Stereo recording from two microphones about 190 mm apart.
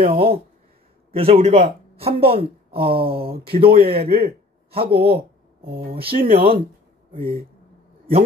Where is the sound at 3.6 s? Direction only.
50° right (ahead or behind).